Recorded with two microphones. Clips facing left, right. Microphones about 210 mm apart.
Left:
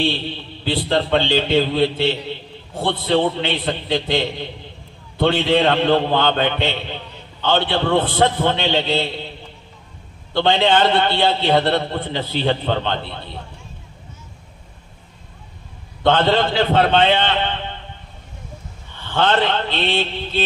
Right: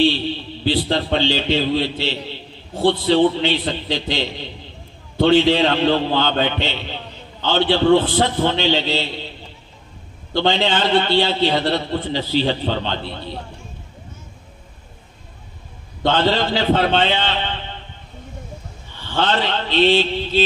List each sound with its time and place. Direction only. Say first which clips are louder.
0.7 s a man's voice: even; 55° left (ahead or behind)
10.3 s a man's voice: left 2 dB; 55° left (ahead or behind)
16.0 s a man's voice: left 2 dB; 55° left (ahead or behind)
18.9 s a man's voice: left 2 dB; 55° left (ahead or behind)